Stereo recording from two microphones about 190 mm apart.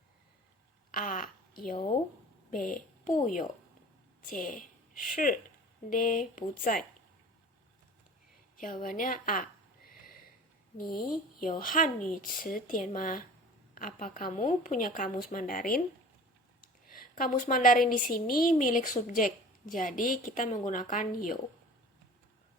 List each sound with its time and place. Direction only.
0.9 s a sound: 45° left (ahead or behind)
2.5 s a woman's voice: 45° left (ahead or behind)
8.6 s a woman's voice: 45° left (ahead or behind)
16.9 s a woman's voice: 45° left (ahead or behind)